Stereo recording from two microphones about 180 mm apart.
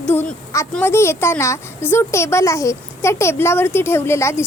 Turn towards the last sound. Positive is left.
turn(degrees=15)  # may be behind; listen again after turning